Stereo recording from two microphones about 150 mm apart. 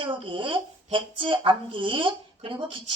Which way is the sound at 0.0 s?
35° right (ahead or behind).